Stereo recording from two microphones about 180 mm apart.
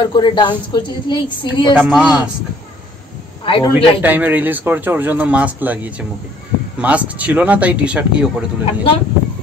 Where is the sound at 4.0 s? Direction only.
10° right (ahead or behind).